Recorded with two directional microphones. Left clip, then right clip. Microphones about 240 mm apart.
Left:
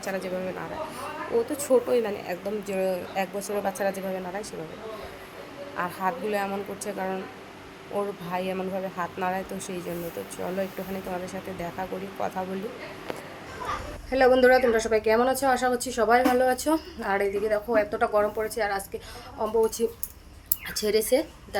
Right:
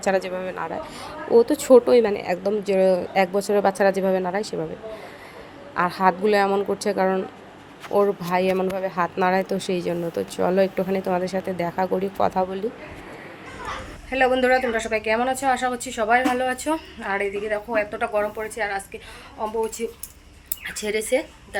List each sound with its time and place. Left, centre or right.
0.0 s a woman's voice: right
5.7 s a woman's voice: right
14.1 s a woman's voice: centre